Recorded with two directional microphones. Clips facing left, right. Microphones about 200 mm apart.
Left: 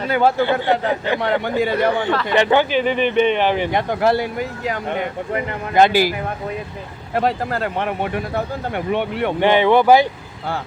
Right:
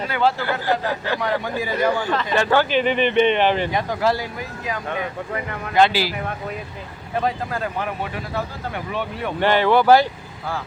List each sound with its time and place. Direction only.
0.1 s speech: 50° left (ahead or behind)
0.6 s speech: 25° left (ahead or behind)
1.2 s speech: 65° left (ahead or behind)
2.3 s speech: 20° left (ahead or behind)
2.8 s speech: 5° left (ahead or behind)
3.7 s speech: 60° left (ahead or behind)
4.7 s speech: 25° left (ahead or behind)
5.7 s speech: 45° left (ahead or behind)
7.1 s speech: 70° left (ahead or behind)
9.4 s speech: 15° left (ahead or behind)